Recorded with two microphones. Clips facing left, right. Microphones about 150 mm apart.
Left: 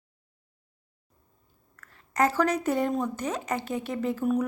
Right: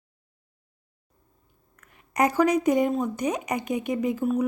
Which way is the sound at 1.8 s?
15° right (ahead or behind).